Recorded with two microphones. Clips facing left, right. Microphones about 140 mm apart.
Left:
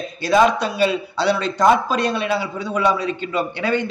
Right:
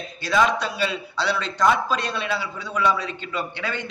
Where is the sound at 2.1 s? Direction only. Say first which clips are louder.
Left 6 dB; 15° left (ahead or behind).